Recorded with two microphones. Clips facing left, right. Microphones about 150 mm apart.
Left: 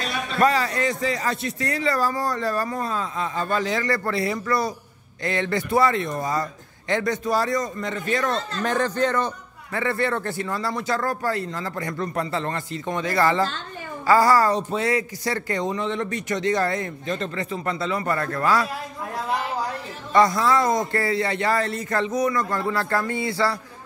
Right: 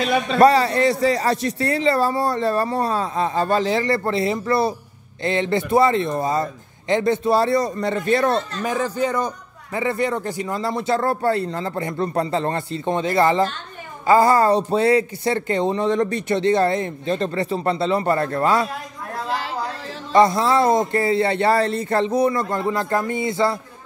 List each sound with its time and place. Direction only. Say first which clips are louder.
0.4 s a man's voice: right 6 dB; 30° right (ahead or behind)
8.6 s a man's voice: left 2 dB; 10° right (ahead or behind); by 18.7 s 25° right (ahead or behind)
19.2 s a sound: even; 80° right
20.1 s speech: right 3 dB; 25° right (ahead or behind)